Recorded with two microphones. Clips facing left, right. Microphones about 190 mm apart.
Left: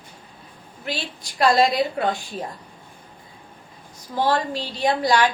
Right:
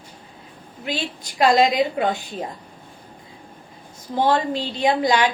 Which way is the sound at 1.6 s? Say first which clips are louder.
Right 1 dB; 20° right (ahead or behind).